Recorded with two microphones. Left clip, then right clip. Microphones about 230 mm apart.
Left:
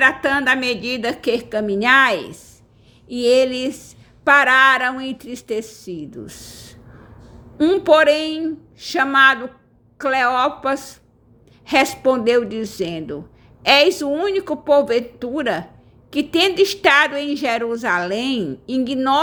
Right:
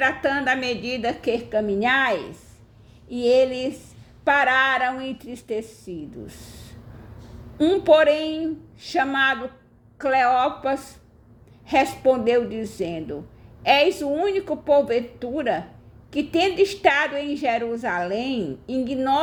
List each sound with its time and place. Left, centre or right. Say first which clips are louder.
0.0 s a woman's voice: left 6 dB; centre